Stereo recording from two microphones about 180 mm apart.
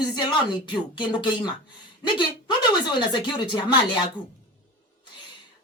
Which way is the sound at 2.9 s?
25° left (ahead or behind).